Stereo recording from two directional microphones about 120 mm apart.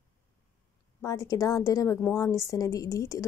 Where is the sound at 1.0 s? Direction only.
30° left (ahead or behind).